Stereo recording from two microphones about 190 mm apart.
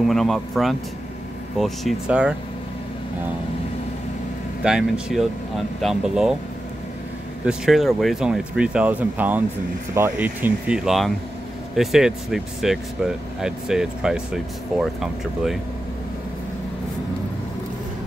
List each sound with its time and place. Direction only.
0.0 s speech: centre (ahead or behind)
4.6 s speech: 5° right (ahead or behind)
7.4 s speech: centre (ahead or behind)